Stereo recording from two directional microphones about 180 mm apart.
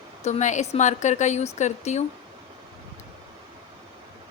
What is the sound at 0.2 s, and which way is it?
A woman's voice, 40° left (ahead or behind).